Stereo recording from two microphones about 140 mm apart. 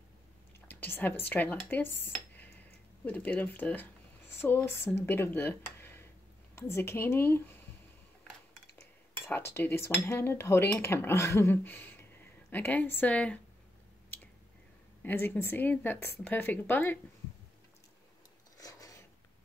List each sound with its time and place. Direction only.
0.7 s speech: 15° left (ahead or behind)
9.3 s speech: 15° left (ahead or behind)
15.0 s speech: 15° left (ahead or behind)
18.6 s filing: 25° left (ahead or behind)